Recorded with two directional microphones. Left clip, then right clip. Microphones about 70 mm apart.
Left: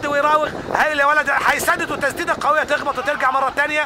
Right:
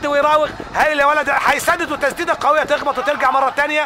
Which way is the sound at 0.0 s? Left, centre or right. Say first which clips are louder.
Right 2 dB; left.